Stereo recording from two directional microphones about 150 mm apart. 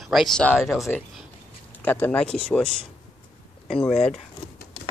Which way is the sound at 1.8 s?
10° left (ahead or behind).